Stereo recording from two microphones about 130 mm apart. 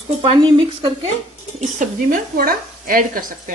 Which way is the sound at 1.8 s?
90° right.